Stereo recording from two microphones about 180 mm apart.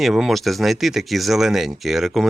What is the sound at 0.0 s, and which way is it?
Speech, centre (ahead or behind).